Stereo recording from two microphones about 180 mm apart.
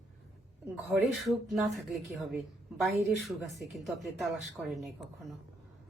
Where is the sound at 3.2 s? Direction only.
Centre (ahead or behind).